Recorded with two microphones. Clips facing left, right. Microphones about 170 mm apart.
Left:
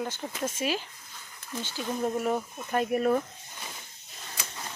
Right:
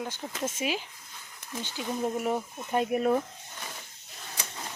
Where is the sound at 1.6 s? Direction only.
15° right (ahead or behind).